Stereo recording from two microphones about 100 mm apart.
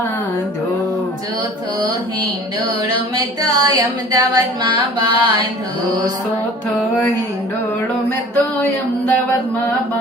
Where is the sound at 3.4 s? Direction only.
40° right (ahead or behind).